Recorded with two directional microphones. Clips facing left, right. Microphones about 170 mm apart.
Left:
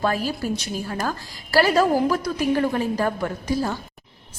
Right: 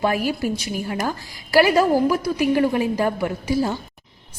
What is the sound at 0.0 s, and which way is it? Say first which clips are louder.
A woman's voice: right 2 dB; 15° right (ahead or behind).